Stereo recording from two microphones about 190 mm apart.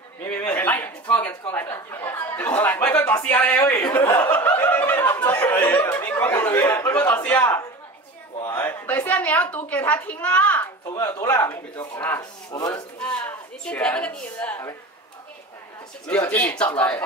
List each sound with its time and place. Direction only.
0.2 s a man's voice: 10° left (ahead or behind)
8.5 s a woman's voice: 10° left (ahead or behind)
13.0 s a woman's voice: 5° left (ahead or behind)
16.1 s a man's voice: 5° left (ahead or behind)